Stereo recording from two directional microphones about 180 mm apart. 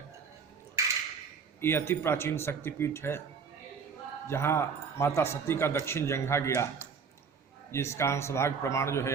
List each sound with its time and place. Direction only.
1.6 s a man's voice: 15° left (ahead or behind)
4.3 s a man's voice: 15° left (ahead or behind)